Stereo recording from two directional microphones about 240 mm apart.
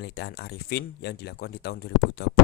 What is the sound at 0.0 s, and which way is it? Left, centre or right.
Speech, left.